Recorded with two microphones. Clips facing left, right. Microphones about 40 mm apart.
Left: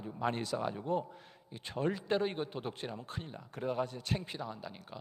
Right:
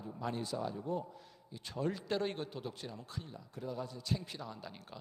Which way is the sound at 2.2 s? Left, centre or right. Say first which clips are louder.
Left 3 dB; centre.